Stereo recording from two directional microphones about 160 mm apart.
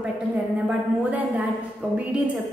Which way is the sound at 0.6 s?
10° right (ahead or behind).